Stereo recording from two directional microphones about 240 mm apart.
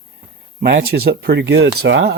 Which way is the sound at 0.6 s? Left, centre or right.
Right.